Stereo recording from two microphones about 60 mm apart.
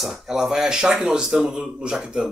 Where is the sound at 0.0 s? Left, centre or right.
Centre.